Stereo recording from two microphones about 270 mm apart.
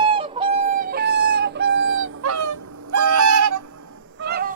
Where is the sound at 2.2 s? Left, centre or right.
Right.